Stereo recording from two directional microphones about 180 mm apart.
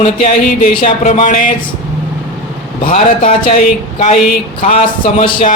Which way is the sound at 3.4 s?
40° left (ahead or behind).